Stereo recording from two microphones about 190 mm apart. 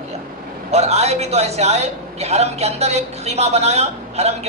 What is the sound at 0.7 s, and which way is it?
A man's voice, 35° right (ahead or behind).